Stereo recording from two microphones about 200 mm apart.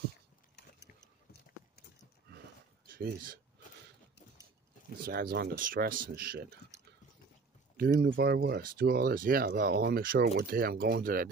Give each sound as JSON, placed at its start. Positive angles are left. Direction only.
{"t": 5.0, "sound": "speech", "side_deg": -50}
{"t": 7.7, "sound": "speech", "side_deg": -50}